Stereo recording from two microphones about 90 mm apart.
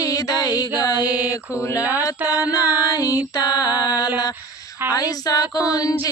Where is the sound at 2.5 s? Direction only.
20° right (ahead or behind).